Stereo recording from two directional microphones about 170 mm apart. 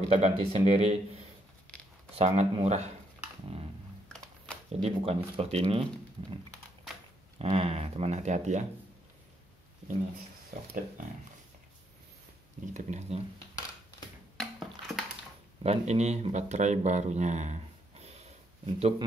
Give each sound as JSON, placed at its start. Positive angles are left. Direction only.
{"t": 0.1, "sound": "speech", "side_deg": -35}
{"t": 2.1, "sound": "speech", "side_deg": -35}
{"t": 4.7, "sound": "speech", "side_deg": -35}
{"t": 7.3, "sound": "speech", "side_deg": -35}
{"t": 12.7, "sound": "speech", "side_deg": -45}
{"t": 14.3, "sound": "a sound", "side_deg": 0}
{"t": 15.6, "sound": "speech", "side_deg": -40}